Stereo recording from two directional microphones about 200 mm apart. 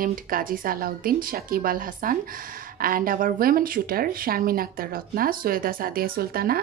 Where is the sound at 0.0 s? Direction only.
45° right (ahead or behind).